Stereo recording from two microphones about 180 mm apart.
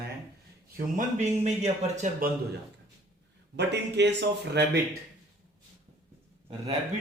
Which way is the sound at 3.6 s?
70° right (ahead or behind).